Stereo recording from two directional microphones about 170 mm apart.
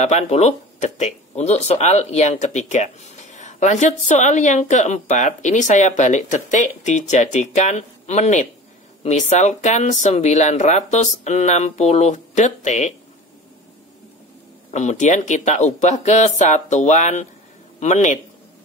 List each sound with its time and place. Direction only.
0.0 s speech: 40° left (ahead or behind)
14.7 s speech: 45° left (ahead or behind)